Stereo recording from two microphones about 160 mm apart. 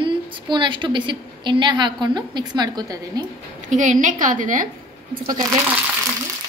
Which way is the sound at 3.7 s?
50° right (ahead or behind).